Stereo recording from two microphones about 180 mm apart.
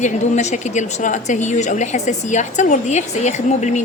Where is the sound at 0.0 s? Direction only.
40° left (ahead or behind).